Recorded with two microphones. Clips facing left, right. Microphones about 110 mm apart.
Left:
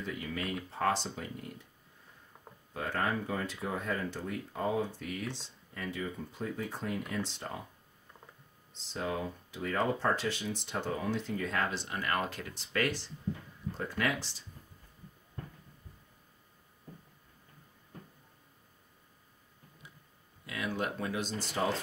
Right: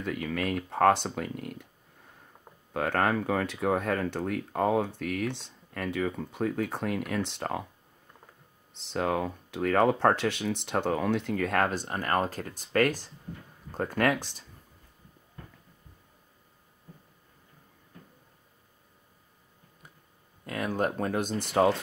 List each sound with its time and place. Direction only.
0.0 s speech: 65° right (ahead or behind)
2.7 s speech: 70° right (ahead or behind)
8.7 s speech: 65° right (ahead or behind)
20.4 s speech: 45° right (ahead or behind); by 21.7 s 65° right (ahead or behind)